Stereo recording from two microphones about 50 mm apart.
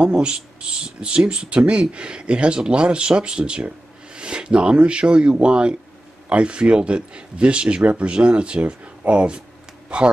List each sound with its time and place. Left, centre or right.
0.0 s speech: centre